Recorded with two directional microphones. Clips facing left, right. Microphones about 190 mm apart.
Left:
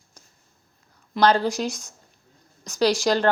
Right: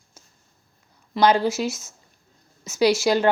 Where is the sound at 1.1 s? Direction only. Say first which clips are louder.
Right 1 dB; 10° right (ahead or behind).